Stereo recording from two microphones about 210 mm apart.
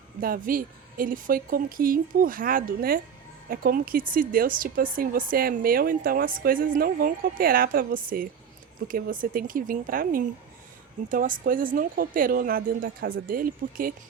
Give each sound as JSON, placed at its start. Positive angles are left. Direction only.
{"t": 0.2, "sound": "a woman's voice", "side_deg": -40}